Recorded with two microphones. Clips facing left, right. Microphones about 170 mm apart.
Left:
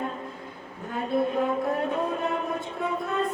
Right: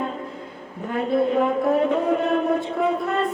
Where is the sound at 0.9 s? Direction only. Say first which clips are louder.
Right 5 dB; 75° right (ahead or behind).